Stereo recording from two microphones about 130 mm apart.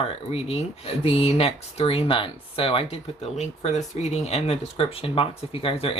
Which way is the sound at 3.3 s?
65° left (ahead or behind).